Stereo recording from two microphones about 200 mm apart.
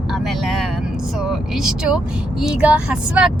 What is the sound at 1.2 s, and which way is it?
Speech, centre (ahead or behind).